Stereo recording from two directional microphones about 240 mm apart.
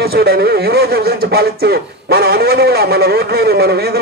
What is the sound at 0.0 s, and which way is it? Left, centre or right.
A man's voice, right.